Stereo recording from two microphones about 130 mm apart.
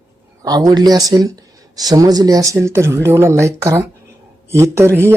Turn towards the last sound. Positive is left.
turn(degrees=-20)  # may be behind; listen again after turning